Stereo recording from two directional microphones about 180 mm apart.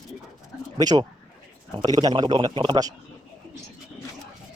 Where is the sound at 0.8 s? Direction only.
20° right (ahead or behind).